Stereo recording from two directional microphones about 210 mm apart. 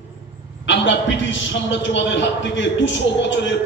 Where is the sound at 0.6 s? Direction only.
60° left (ahead or behind).